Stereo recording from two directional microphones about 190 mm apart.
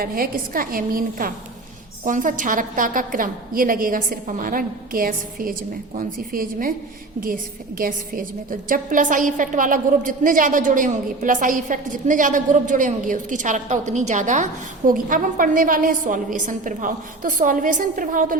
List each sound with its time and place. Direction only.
0.0 s a woman's voice: 50° right (ahead or behind)
7.8 s a woman's voice: 45° right (ahead or behind)